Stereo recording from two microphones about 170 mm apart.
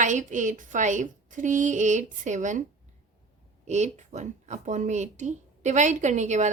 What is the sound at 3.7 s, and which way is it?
A woman's voice, 40° right (ahead or behind).